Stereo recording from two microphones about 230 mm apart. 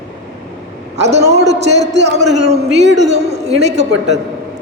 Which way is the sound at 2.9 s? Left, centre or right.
Right.